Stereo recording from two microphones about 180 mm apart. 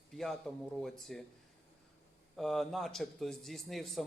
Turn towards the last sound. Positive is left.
turn(degrees=0)  # may be behind; listen again after turning